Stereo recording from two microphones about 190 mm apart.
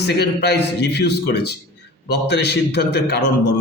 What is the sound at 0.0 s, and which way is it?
A man's voice, 60° left (ahead or behind).